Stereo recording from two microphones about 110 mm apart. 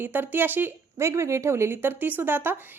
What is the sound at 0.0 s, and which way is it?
A woman's voice, 20° right (ahead or behind).